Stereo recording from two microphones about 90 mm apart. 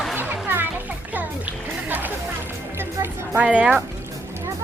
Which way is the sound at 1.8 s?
20° right (ahead or behind).